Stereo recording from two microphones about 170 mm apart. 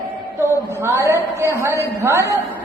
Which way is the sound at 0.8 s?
15° right (ahead or behind).